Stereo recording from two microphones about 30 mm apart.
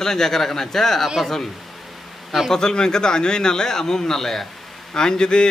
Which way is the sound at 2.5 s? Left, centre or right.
Left.